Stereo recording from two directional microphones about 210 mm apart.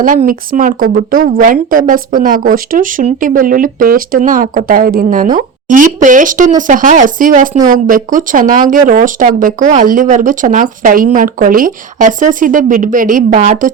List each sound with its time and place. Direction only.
0.0 s speech: 40° right (ahead or behind)